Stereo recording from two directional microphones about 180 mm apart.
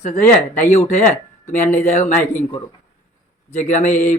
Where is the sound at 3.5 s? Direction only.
40° left (ahead or behind).